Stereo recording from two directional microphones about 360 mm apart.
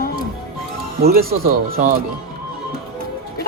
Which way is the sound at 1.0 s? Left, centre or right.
Right.